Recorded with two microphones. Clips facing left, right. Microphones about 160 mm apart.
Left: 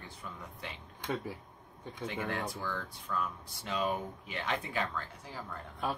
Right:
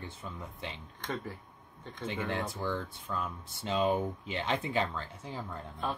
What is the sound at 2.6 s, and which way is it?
Speech, 25° right (ahead or behind).